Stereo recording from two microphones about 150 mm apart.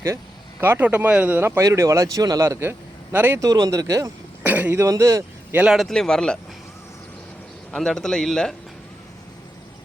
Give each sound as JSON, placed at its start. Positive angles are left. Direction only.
{"t": 0.6, "sound": "speech", "side_deg": -10}
{"t": 4.4, "sound": "speech", "side_deg": -10}
{"t": 5.5, "sound": "a man's voice", "side_deg": -5}
{"t": 7.7, "sound": "a man's voice", "side_deg": 5}